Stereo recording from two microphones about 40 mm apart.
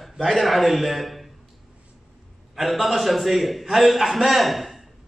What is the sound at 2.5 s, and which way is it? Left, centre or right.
A man's voice, centre.